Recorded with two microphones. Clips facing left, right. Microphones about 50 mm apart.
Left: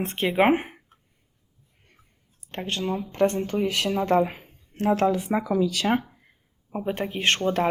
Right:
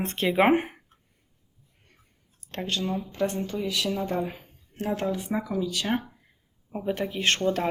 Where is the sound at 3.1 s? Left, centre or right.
Left.